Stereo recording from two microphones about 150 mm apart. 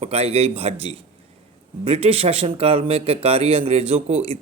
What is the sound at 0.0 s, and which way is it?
Speech, 45° right (ahead or behind).